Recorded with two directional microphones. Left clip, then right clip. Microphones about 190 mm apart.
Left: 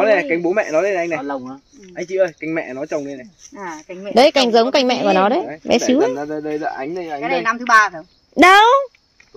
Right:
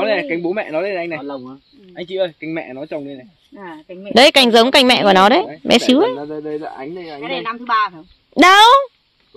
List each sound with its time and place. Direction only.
0.0 s speech: 60° right (ahead or behind)
1.2 s speech: 5° right (ahead or behind)
2.0 s speech: 50° right (ahead or behind)
3.5 s speech: 15° right (ahead or behind)
4.1 s speech: 35° right (ahead or behind); by 7.2 s 15° right (ahead or behind)
7.4 s speech: 10° left (ahead or behind)
8.4 s speech: 20° right (ahead or behind)